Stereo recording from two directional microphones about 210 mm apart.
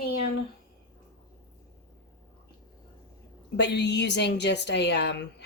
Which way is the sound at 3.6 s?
55° left (ahead or behind).